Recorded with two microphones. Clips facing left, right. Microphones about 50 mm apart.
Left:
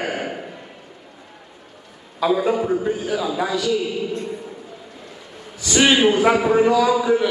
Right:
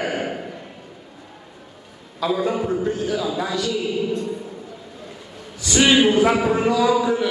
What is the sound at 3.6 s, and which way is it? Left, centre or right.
Speech, left.